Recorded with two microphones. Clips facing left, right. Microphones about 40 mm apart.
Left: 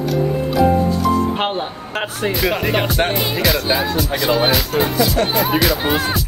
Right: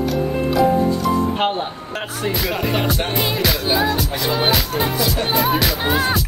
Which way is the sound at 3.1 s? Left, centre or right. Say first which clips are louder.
Left 2 dB; centre.